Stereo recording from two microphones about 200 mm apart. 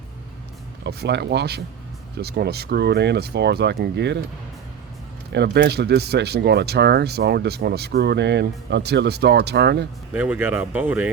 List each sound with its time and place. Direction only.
0.9 s speech: 55° right (ahead or behind)
5.3 s speech: 60° right (ahead or behind)
10.1 s speech: 5° right (ahead or behind)